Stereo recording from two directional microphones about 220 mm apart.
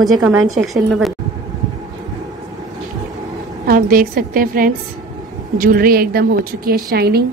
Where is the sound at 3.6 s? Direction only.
40° right (ahead or behind).